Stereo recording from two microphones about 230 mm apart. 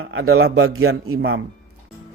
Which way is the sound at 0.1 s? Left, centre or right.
Right.